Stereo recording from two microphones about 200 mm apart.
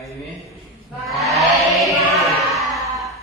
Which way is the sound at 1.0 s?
Centre (ahead or behind).